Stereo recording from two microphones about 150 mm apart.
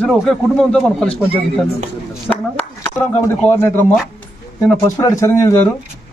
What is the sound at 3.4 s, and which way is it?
Speech, 15° left (ahead or behind).